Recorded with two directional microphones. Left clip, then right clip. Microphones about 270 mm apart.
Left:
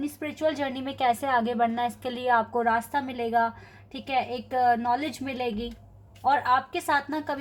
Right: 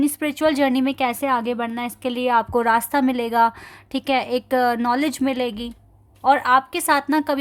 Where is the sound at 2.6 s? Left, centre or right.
Right.